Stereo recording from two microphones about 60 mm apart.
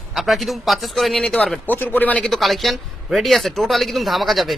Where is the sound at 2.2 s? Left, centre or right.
Centre.